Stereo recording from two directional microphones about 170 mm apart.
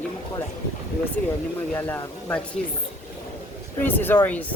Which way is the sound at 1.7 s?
10° left (ahead or behind).